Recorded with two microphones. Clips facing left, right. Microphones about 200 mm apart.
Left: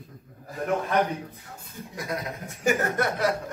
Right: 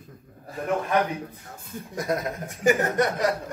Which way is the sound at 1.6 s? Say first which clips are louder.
Right 5 dB; 50° right (ahead or behind).